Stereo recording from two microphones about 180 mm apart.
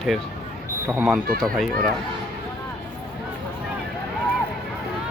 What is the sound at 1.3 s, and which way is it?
Speech, 5° left (ahead or behind).